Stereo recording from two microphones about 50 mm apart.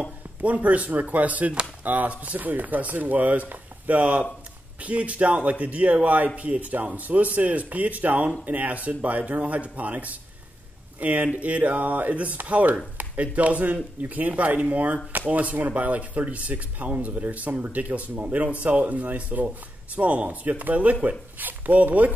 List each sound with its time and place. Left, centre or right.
0.4 s speech: right